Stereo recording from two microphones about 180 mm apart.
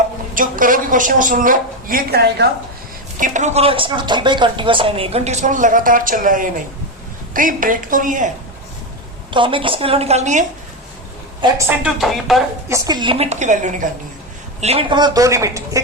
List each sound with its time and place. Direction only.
0.3 s a woman's voice: 50° right (ahead or behind)
3.2 s a woman's voice: 45° right (ahead or behind)
9.3 s speech: 30° right (ahead or behind)
11.3 s a woman's voice: 20° right (ahead or behind)
11.8 s speech: centre (ahead or behind)
12.6 s speech: 15° right (ahead or behind); by 13.8 s 45° right (ahead or behind)
14.6 s a woman's voice: 35° right (ahead or behind); by 15.8 s 15° right (ahead or behind)